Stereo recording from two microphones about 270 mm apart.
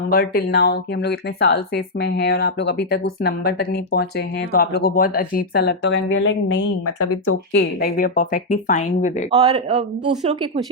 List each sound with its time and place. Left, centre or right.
0.1 s speech: left
7.5 s speech: left
9.3 s a man's voice: right